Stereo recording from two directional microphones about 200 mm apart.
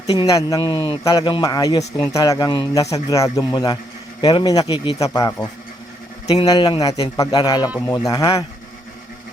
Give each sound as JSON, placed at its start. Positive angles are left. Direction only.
{"t": 0.1, "sound": "a man's voice", "side_deg": 20}